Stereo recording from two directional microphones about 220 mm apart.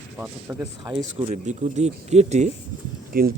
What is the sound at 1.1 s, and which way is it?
Speech, 30° right (ahead or behind).